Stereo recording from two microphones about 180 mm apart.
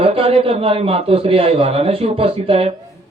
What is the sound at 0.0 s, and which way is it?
A man's voice, 35° right (ahead or behind).